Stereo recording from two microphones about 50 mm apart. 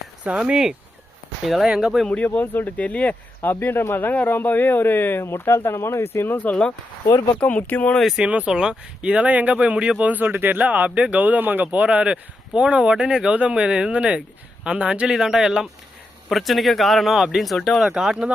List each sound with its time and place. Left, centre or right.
0.3 s speech: right
1.5 s speech: centre
1.7 s speech: centre
2.0 s speech: left
2.7 s speech: left
3.5 s speech: left
5.2 s speech: left
6.4 s speech: left
8.2 s speech: right
10.0 s speech: right
15.1 s speech: centre
16.3 s speech: centre
17.9 s speech: centre